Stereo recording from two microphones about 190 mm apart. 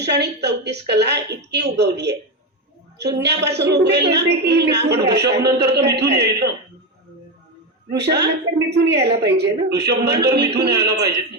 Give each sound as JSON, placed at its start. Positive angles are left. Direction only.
{"t": 0.0, "sound": "a woman's voice", "side_deg": -60}
{"t": 7.9, "sound": "a woman's voice", "side_deg": -60}